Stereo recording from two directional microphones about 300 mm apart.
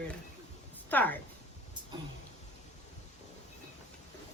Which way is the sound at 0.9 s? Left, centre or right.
Centre.